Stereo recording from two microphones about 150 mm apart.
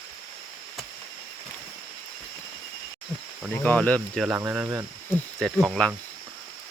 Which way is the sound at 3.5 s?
10° left (ahead or behind).